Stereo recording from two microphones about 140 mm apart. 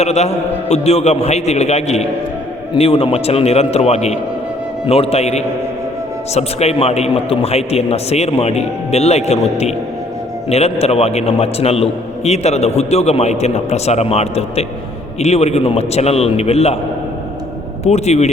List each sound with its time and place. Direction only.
0.0 s a man's voice: 50° left (ahead or behind)
17.8 s a man's voice: 50° left (ahead or behind)